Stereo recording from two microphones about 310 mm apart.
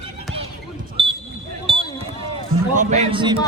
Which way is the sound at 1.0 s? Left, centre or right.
Centre.